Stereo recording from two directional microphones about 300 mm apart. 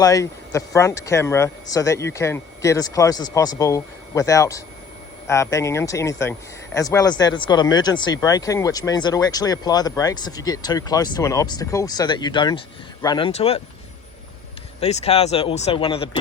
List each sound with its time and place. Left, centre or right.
0.0 s speech: centre
14.8 s speech: left